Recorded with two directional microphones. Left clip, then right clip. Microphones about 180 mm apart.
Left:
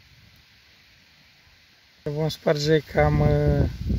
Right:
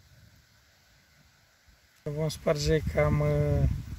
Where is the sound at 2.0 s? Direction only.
30° left (ahead or behind).